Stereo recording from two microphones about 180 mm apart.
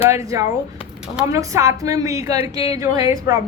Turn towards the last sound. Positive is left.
turn(degrees=-20)  # may be behind; listen again after turning